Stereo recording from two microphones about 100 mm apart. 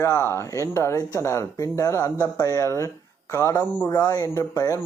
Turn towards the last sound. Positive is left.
turn(degrees=30)  # may be behind; listen again after turning